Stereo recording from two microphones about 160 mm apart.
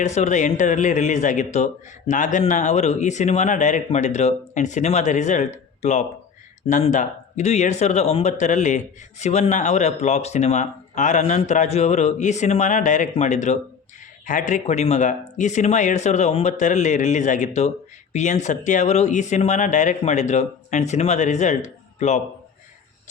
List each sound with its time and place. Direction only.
0.0 s speech: 45° left (ahead or behind)